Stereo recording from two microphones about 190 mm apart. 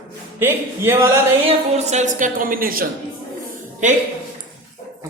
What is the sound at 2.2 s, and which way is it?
Speech, 45° right (ahead or behind).